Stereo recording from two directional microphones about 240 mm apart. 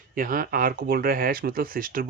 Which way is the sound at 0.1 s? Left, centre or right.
Right.